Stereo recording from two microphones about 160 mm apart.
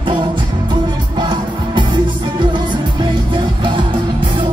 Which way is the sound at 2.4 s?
30° right (ahead or behind).